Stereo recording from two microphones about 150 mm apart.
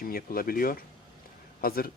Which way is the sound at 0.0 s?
75° left (ahead or behind).